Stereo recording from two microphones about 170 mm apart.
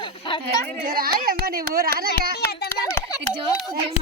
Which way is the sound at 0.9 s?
60° right (ahead or behind).